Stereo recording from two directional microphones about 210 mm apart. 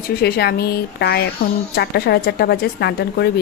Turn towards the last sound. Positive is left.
turn(degrees=50)  # may be behind; listen again after turning